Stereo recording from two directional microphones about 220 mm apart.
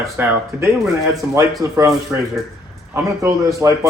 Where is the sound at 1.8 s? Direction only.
15° right (ahead or behind).